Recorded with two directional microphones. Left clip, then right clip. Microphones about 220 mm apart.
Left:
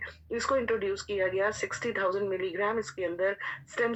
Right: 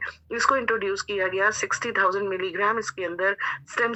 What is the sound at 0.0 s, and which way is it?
Speech, 15° right (ahead or behind).